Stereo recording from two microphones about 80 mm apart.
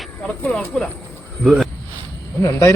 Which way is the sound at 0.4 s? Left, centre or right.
Centre.